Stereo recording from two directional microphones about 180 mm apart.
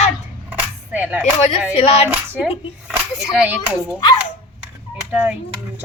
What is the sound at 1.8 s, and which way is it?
Speech, 35° left (ahead or behind).